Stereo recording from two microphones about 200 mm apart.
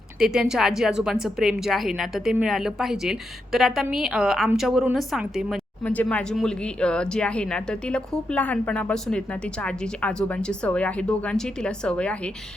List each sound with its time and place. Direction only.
0.2 s a woman's voice: 5° right (ahead or behind)